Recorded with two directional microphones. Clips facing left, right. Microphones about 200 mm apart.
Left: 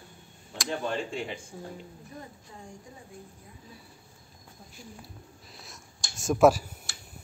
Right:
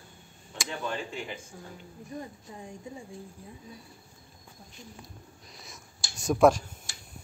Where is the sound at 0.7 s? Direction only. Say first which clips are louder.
Left 4 dB; 35° left (ahead or behind).